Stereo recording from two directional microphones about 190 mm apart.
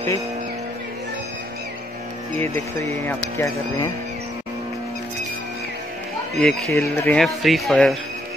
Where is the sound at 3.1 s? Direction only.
15° left (ahead or behind).